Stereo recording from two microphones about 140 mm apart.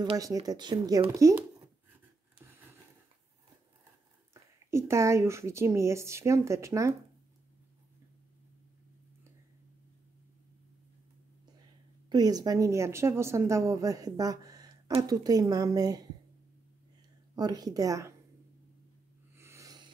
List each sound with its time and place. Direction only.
0.2 s speech: 25° right (ahead or behind)
4.3 s speech: 20° right (ahead or behind)
12.1 s speech: 30° right (ahead or behind)
17.4 s speech: 25° right (ahead or behind)
19.3 s a sound: 20° right (ahead or behind)